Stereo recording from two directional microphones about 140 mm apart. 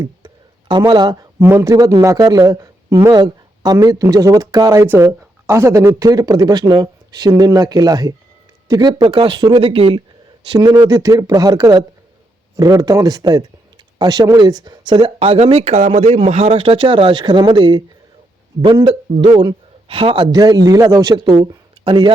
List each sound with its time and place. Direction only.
0.7 s speech: 35° right (ahead or behind)